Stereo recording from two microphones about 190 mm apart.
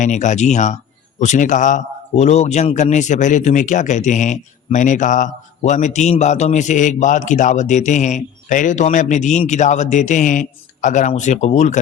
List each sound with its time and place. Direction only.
0.0 s speech: 40° left (ahead or behind)